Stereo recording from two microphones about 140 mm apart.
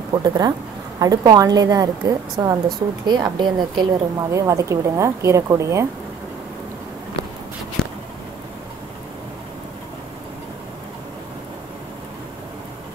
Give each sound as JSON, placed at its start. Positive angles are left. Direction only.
{"t": 0.1, "sound": "a woman's voice", "side_deg": -30}